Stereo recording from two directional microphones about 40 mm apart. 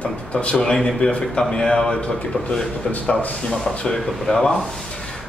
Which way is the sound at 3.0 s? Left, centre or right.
Left.